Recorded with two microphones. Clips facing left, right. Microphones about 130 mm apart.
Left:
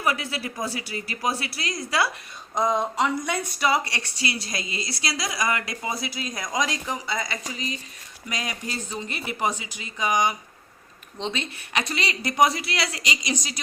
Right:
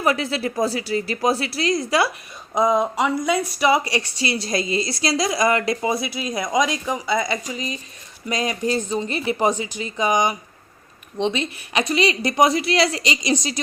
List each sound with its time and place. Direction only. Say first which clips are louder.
0.0 s a woman's voice: right 6 dB; 30° right (ahead or behind)
2.6 s a woman's voice: right 4 dB; 5° right (ahead or behind); by 5.9 s 30° right (ahead or behind)
6.0 s speech: right 5 dB; 15° right (ahead or behind)
6.3 s a woman's voice: right 7 dB; 25° right (ahead or behind)
8.3 s speech: right 10 dB; 35° right (ahead or behind)
11.2 s a woman's voice: right 8 dB; 10° right (ahead or behind); by 13.6 s 35° right (ahead or behind)